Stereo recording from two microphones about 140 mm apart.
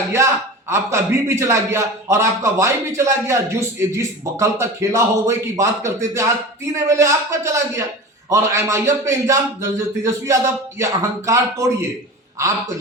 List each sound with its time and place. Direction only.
0.1 s a man's voice: 20° right (ahead or behind)